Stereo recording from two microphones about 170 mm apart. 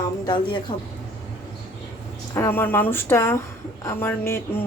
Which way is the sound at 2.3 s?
15° left (ahead or behind).